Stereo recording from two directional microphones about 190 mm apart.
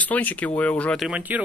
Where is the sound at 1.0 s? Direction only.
5° right (ahead or behind).